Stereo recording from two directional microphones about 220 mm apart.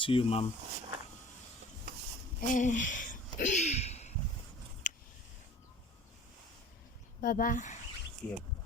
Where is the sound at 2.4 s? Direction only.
35° left (ahead or behind).